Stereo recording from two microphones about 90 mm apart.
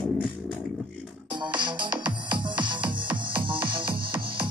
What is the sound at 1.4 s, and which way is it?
Music, 55° right (ahead or behind).